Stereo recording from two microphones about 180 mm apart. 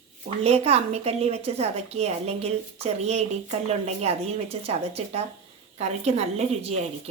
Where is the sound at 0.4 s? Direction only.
35° right (ahead or behind).